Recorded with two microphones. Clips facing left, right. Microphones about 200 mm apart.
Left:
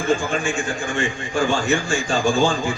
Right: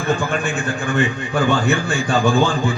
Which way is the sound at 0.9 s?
60° right (ahead or behind).